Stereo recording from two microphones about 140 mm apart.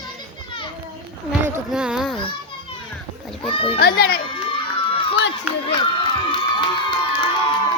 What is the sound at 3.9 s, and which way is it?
Speech, 90° left.